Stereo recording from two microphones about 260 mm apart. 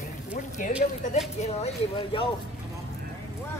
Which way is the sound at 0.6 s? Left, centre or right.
Left.